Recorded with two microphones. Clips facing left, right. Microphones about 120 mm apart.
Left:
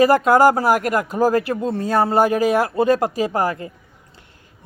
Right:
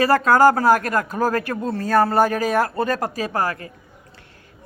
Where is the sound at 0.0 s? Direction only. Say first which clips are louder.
Left 2 dB; 20° left (ahead or behind).